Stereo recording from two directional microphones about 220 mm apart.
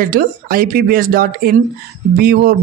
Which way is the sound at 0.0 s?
40° right (ahead or behind).